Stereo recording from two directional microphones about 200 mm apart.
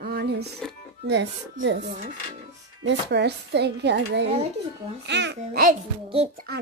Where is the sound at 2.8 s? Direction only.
60° right (ahead or behind).